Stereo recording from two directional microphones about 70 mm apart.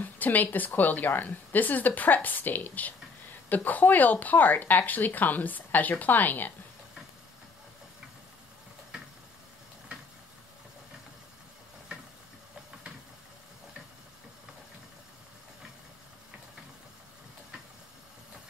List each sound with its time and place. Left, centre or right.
0.0 s speech: left